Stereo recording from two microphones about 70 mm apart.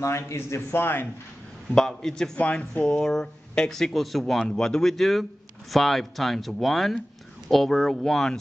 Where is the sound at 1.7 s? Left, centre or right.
Centre.